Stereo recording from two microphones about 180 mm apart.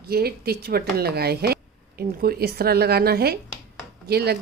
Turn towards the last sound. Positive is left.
turn(degrees=-60)  # may be behind; listen again after turning